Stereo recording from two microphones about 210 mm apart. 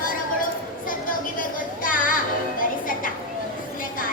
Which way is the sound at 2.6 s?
40° left (ahead or behind).